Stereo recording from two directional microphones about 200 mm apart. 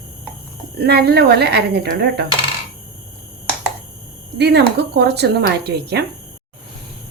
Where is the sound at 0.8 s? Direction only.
55° right (ahead or behind).